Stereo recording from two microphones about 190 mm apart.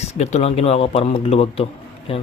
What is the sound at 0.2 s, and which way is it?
Speech, 35° left (ahead or behind).